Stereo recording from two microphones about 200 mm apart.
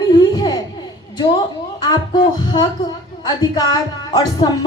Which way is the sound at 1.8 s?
20° left (ahead or behind).